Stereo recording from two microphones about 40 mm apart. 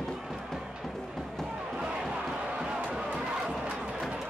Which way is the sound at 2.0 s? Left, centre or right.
Right.